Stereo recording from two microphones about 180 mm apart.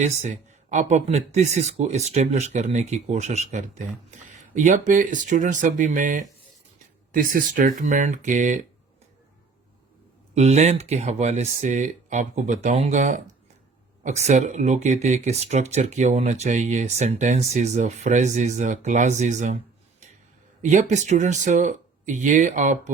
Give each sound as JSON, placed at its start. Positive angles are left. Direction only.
{"t": 0.0, "sound": "speech", "side_deg": -40}
{"t": 10.3, "sound": "speech", "side_deg": -40}
{"t": 20.6, "sound": "speech", "side_deg": -40}